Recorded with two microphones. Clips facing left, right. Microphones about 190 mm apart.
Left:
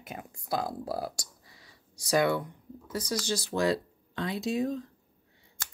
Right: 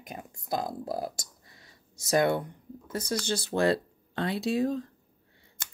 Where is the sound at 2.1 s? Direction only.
50° right (ahead or behind).